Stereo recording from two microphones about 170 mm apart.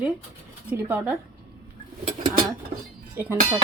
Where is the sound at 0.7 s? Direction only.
10° right (ahead or behind).